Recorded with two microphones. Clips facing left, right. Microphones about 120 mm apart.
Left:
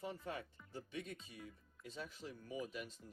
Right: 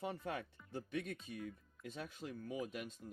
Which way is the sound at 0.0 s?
65° right (ahead or behind).